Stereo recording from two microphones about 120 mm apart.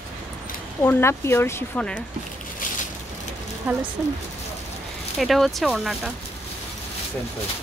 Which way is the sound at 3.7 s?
15° right (ahead or behind).